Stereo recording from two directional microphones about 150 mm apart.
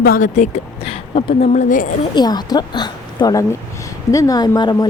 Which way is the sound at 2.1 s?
30° left (ahead or behind).